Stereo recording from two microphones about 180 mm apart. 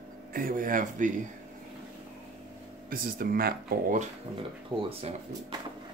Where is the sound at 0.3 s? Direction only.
50° right (ahead or behind).